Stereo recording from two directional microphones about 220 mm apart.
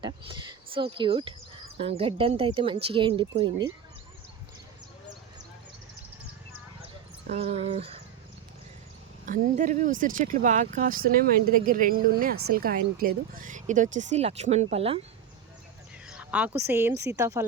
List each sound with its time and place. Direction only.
0.0 s speech: 20° right (ahead or behind)
7.3 s speech: 25° right (ahead or behind)
9.2 s speech: 35° right (ahead or behind)
16.0 s speech: 5° right (ahead or behind)